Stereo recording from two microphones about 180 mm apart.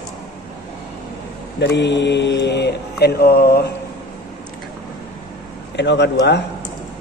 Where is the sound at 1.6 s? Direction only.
75° left (ahead or behind).